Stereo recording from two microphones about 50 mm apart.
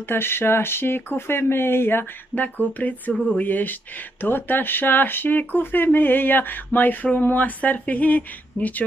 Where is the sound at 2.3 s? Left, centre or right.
Left.